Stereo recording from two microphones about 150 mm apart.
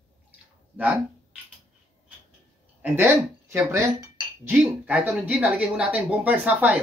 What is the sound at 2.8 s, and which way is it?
A woman's voice, 15° right (ahead or behind).